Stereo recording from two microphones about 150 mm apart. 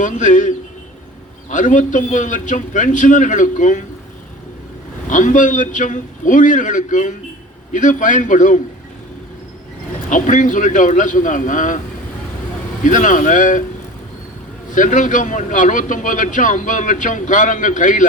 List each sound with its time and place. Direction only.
0.0 s a man's voice: 55° left (ahead or behind)
5.0 s a man's voice: 60° left (ahead or behind)
10.1 s a man's voice: 60° left (ahead or behind)
12.8 s a man's voice: 60° left (ahead or behind)
14.7 s a man's voice: 60° left (ahead or behind)